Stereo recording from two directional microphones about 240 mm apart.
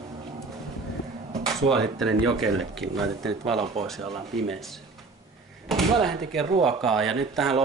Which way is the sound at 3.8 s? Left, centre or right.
Right.